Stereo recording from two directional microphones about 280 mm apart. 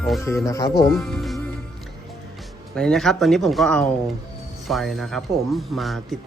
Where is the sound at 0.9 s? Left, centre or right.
Centre.